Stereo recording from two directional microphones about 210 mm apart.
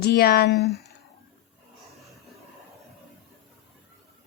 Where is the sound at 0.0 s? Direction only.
50° left (ahead or behind).